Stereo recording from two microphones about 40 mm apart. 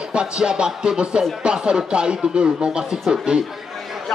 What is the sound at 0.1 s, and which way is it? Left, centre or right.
Music, right.